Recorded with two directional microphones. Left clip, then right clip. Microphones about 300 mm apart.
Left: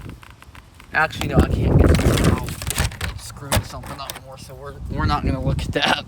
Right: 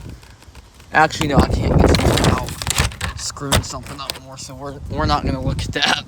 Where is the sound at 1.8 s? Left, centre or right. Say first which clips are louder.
Right 5 dB; centre.